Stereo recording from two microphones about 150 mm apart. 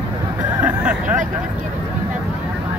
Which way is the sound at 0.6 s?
10° right (ahead or behind).